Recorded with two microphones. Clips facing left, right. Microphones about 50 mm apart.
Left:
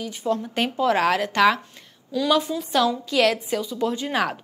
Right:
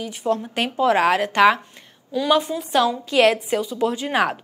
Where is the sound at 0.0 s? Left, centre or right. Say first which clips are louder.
Right 2 dB; right.